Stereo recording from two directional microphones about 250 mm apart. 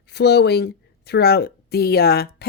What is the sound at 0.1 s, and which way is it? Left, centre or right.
Speech, left.